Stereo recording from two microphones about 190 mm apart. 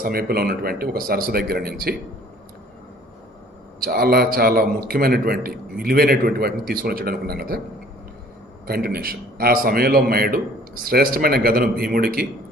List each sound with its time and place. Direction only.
0.0 s a man's voice: 50° right (ahead or behind)
3.8 s a man's voice: 55° right (ahead or behind)
8.6 s a man's voice: 50° right (ahead or behind)